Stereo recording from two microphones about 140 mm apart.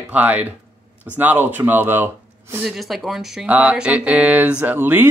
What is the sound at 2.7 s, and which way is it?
Speech, centre (ahead or behind).